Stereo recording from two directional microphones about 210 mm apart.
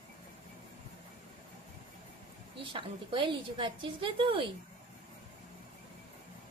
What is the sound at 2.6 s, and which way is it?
A woman's voice, 25° right (ahead or behind).